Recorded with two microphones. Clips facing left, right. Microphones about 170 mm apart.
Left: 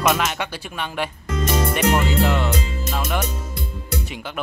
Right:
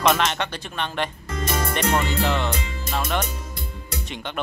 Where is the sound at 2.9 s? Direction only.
5° left (ahead or behind).